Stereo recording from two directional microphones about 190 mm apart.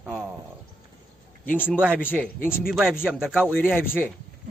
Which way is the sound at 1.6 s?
5° right (ahead or behind).